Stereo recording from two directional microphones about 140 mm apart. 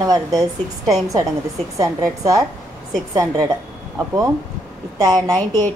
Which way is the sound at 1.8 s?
25° right (ahead or behind).